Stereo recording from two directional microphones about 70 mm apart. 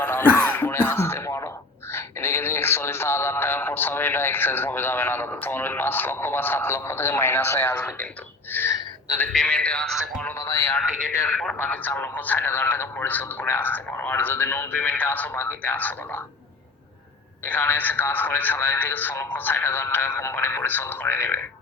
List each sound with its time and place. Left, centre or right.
0.0 s throat clearing: left
0.3 s speech: left
8.4 s a sound: left
9.3 s a man's voice: centre
10.3 s speech: left
11.5 s speech: left
17.4 s speech: left